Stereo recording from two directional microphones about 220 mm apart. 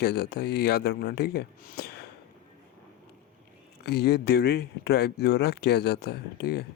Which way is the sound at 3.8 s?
45° left (ahead or behind).